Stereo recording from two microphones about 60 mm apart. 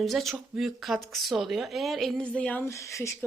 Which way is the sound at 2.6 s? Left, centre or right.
Left.